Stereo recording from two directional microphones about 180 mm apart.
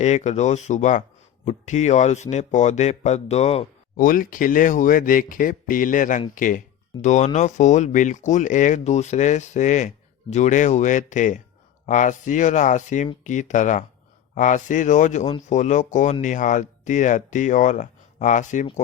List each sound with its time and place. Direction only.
0.0 s speech: 40° left (ahead or behind)
3.9 s speech: 50° left (ahead or behind)